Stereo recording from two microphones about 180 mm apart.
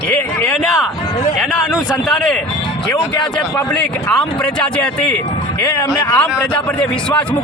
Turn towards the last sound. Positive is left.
turn(degrees=15)  # may be behind; listen again after turning